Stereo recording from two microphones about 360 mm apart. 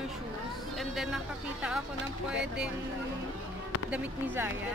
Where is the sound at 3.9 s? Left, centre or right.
Centre.